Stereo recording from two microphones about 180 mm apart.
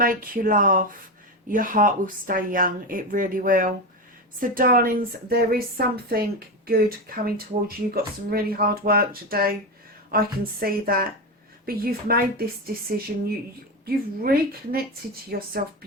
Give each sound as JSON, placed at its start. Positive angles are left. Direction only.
{"t": 0.0, "sound": "a woman's voice", "side_deg": -50}